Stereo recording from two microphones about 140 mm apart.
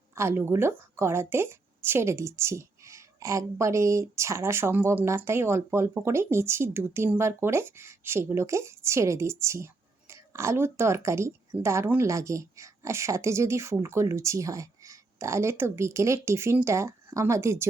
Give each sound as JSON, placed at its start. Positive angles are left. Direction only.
{"t": 0.2, "sound": "speech", "side_deg": -20}